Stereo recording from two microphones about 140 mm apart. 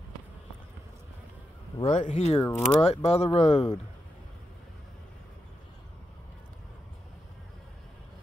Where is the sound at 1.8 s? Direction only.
55° left (ahead or behind).